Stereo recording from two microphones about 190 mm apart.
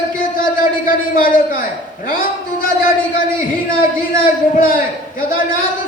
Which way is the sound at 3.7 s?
50° left (ahead or behind).